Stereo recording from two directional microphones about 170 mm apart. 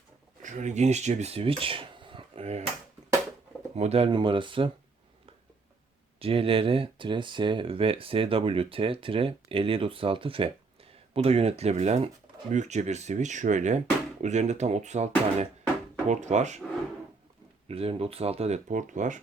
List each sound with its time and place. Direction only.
0.4 s speech: 45° right (ahead or behind)
3.8 s speech: 35° right (ahead or behind)
6.1 s speech: 35° right (ahead or behind)
17.7 s speech: 35° right (ahead or behind)